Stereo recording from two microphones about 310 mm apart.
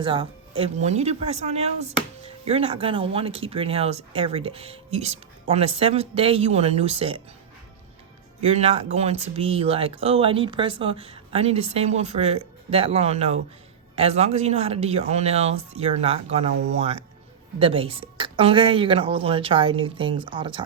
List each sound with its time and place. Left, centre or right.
0.0 s speech: centre
8.4 s a woman's voice: right